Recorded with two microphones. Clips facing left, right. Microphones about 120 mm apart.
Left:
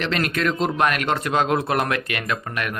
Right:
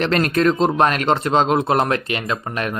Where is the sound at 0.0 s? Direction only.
40° right (ahead or behind).